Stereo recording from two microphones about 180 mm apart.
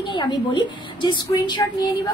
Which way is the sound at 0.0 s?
25° left (ahead or behind).